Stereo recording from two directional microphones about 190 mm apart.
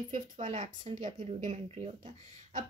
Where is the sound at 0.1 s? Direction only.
35° right (ahead or behind).